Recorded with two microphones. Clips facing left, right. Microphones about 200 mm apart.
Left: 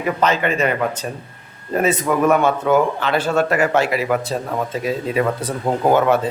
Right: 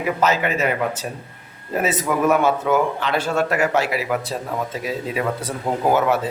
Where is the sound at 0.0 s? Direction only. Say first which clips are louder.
Left 1 dB; 5° right (ahead or behind).